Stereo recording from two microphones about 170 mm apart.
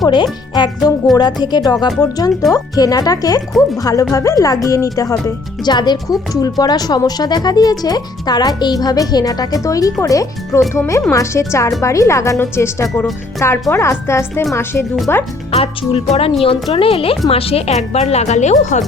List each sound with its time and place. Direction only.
0.0 s a woman's voice: 25° left (ahead or behind)
15.5 s a woman's voice: 35° left (ahead or behind)